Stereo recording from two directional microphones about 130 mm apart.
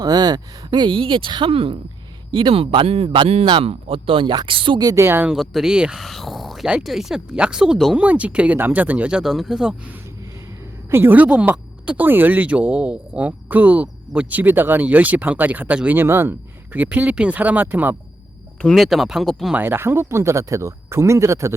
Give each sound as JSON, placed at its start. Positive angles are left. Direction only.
{"t": 0.0, "sound": "speech", "side_deg": -30}
{"t": 5.3, "sound": "speech", "side_deg": -5}
{"t": 18.6, "sound": "speech", "side_deg": 0}
{"t": 19.5, "sound": "speech", "side_deg": -15}